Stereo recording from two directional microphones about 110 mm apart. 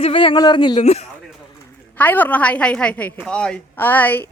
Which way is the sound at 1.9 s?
15° left (ahead or behind).